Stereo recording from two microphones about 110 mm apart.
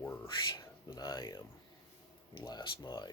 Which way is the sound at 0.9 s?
40° left (ahead or behind).